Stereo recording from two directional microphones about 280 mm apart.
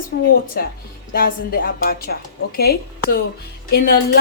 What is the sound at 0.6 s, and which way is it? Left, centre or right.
A woman's voice, left.